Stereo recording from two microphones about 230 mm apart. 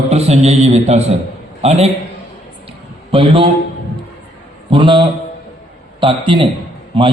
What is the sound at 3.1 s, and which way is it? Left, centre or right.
Speech, right.